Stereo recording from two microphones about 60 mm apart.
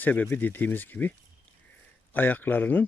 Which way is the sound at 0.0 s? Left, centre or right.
Left.